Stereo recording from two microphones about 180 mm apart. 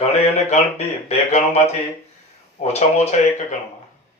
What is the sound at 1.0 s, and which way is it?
Speech, 35° left (ahead or behind).